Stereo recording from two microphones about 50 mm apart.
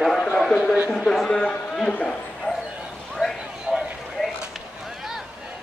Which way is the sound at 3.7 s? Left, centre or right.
Centre.